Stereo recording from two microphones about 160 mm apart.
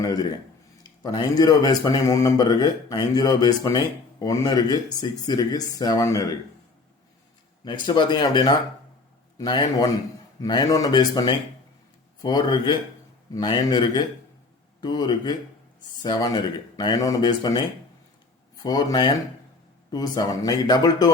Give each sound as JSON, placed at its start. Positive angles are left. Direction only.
{"t": 0.0, "sound": "speech", "side_deg": 25}
{"t": 7.9, "sound": "speech", "side_deg": 30}